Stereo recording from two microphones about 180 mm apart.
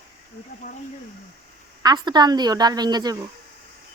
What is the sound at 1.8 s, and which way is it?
Speech, 20° right (ahead or behind).